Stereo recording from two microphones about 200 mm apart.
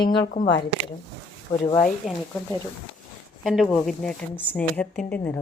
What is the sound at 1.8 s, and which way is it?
Speech, centre (ahead or behind).